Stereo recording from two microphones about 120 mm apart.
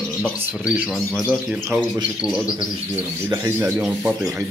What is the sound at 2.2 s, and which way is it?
Speech, 5° right (ahead or behind).